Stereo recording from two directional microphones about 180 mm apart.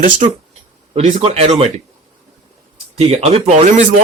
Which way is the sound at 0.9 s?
35° right (ahead or behind).